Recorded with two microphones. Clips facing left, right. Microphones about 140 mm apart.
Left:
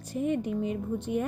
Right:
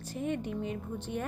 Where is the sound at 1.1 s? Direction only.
60° left (ahead or behind).